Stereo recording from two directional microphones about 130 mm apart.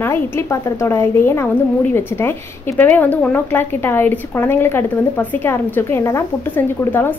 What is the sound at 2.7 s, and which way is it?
A woman's voice, 15° left (ahead or behind).